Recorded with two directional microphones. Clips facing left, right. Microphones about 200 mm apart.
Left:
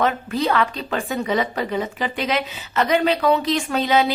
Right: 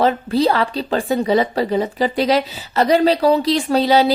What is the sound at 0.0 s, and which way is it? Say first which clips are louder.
A woman's voice: right 5 dB; 35° right (ahead or behind).